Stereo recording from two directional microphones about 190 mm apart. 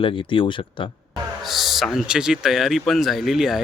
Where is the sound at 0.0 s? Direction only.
25° left (ahead or behind).